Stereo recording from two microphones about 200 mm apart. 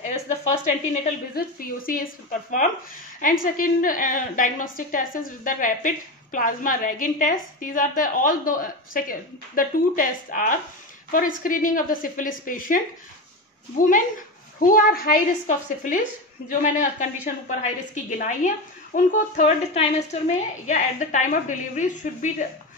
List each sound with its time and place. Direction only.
0.5 s a woman's voice: 40° left (ahead or behind)
3.2 s a woman's voice: 45° left (ahead or behind)